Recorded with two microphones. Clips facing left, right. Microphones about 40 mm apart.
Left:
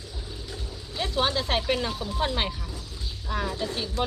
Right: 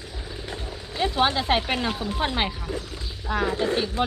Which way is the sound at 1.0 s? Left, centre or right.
Right.